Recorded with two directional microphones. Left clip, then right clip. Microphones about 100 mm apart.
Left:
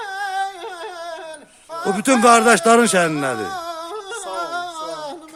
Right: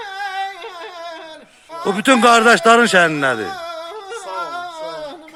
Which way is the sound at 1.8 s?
Centre (ahead or behind).